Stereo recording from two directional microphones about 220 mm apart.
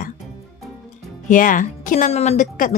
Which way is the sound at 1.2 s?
35° left (ahead or behind).